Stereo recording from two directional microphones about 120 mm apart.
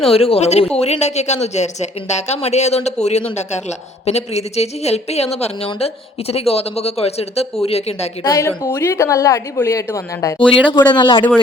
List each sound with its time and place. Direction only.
0.1 s speech: 55° left (ahead or behind)
8.2 s speech: 25° left (ahead or behind)
10.7 s speech: 40° left (ahead or behind)